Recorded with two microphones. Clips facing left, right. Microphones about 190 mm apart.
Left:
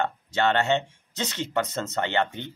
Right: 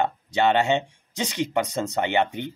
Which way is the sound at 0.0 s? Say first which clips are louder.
Right 3 dB; 15° right (ahead or behind).